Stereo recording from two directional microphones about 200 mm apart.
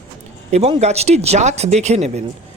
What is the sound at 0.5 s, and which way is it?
A man's voice, 30° right (ahead or behind).